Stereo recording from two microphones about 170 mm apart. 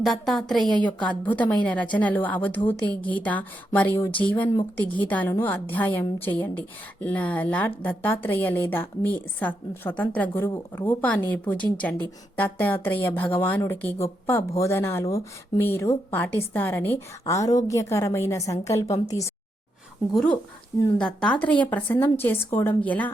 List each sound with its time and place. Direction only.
0.0 s a woman's voice: centre (ahead or behind); by 19.3 s 20° left (ahead or behind)
20.1 s a woman's voice: 5° left (ahead or behind)